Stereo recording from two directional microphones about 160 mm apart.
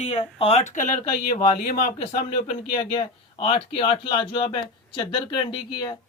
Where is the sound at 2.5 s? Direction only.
35° left (ahead or behind).